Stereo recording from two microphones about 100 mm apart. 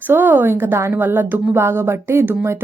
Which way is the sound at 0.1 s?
20° right (ahead or behind).